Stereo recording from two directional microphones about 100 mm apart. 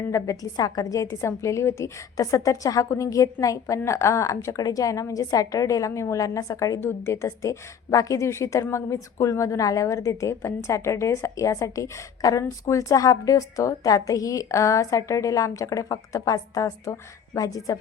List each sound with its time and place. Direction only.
0.1 s a woman's voice: 35° left (ahead or behind)